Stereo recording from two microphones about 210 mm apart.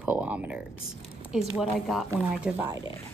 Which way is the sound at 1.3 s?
Centre (ahead or behind).